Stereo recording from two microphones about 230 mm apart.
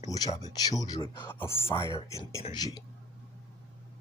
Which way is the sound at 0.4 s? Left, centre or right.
Centre.